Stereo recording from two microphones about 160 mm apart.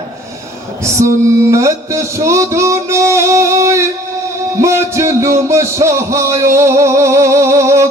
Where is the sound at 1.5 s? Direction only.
20° right (ahead or behind).